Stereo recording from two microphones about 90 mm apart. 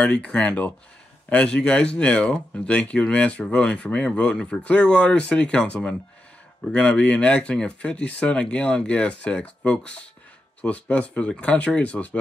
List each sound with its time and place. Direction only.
0.0 s speech: 10° left (ahead or behind)